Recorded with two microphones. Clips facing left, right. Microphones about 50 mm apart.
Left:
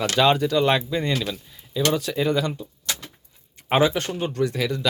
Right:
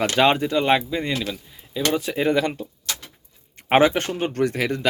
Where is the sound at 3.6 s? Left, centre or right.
Right.